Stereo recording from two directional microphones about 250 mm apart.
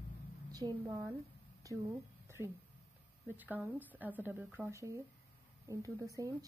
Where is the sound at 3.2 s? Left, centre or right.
Centre.